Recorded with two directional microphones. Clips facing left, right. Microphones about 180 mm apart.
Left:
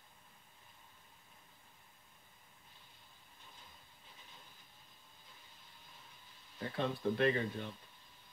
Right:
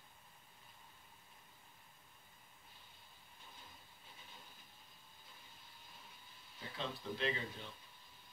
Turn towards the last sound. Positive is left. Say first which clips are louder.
# left 8 dB
turn(degrees=55)  # may be behind; listen again after turning